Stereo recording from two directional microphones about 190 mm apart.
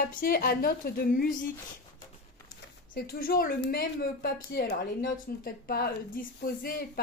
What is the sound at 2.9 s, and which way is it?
A woman's voice, 55° left (ahead or behind).